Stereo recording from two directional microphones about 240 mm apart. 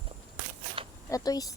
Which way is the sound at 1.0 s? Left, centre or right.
Centre.